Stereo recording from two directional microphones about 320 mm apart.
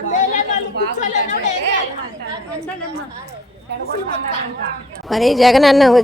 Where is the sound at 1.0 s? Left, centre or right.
Left.